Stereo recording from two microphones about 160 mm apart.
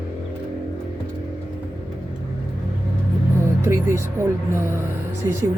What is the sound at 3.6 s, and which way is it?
Vehicle, 15° right (ahead or behind).